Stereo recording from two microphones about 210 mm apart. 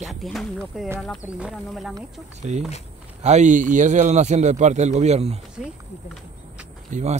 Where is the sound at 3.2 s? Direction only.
35° right (ahead or behind).